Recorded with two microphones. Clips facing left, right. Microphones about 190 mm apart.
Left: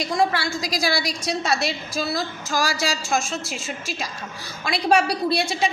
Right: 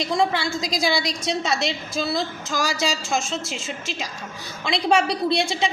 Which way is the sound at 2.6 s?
20° right (ahead or behind).